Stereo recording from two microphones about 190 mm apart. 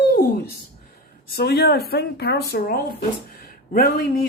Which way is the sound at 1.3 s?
55° left (ahead or behind).